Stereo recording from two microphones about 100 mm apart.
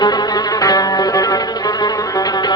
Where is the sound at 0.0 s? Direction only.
40° left (ahead or behind).